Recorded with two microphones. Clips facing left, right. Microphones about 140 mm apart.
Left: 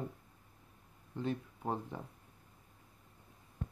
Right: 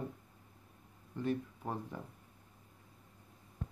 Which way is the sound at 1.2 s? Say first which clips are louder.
Right 2 dB; 20° left (ahead or behind).